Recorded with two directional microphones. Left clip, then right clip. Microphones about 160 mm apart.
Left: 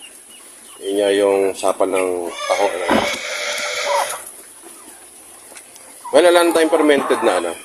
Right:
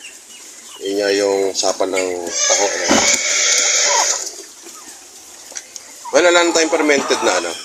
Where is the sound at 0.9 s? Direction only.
10° left (ahead or behind).